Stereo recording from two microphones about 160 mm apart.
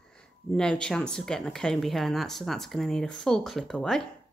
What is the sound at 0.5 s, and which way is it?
Speech, 5° left (ahead or behind).